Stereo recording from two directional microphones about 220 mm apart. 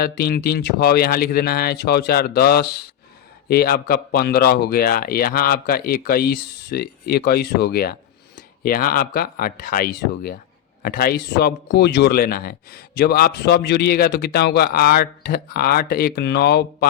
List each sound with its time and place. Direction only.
0.0 s speech: 45° left (ahead or behind)